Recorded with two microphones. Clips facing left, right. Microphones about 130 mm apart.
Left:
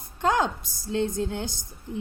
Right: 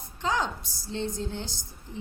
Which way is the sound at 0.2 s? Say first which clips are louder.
Left 5 dB; 50° left (ahead or behind).